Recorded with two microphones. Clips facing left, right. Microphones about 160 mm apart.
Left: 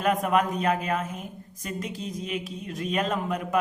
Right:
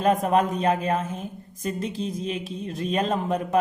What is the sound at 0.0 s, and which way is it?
A woman's voice, 30° right (ahead or behind).